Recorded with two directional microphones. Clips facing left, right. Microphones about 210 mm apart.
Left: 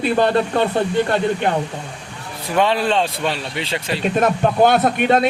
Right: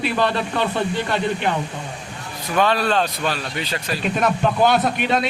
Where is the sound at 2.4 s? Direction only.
25° left (ahead or behind).